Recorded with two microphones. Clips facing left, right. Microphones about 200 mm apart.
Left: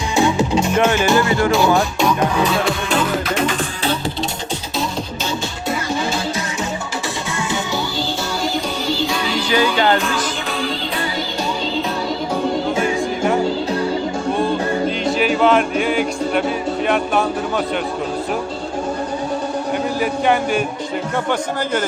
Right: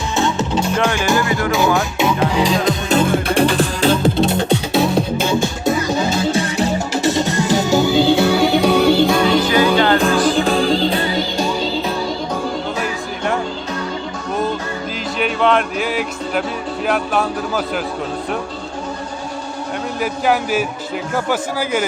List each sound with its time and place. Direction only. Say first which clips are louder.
0.2 s music: left 3 dB; 10° left (ahead or behind)
1.0 s music: left 1 dB; 15° right (ahead or behind)
1.5 s music: left 1 dB; 5° right (ahead or behind)
3.1 s music: right 4 dB; 35° right (ahead or behind)
4.0 s music: right 8 dB; 55° right (ahead or behind)
5.9 s music: right 4 dB; 40° right (ahead or behind)
10.3 s music: right 8 dB; 40° right (ahead or behind)
12.8 s music: left 4 dB; centre (ahead or behind)
15.2 s music: left 1 dB; centre (ahead or behind)
20.0 s a man's voice: right 1 dB; centre (ahead or behind)